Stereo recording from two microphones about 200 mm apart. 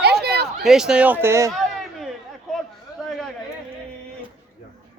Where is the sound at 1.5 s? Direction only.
Centre (ahead or behind).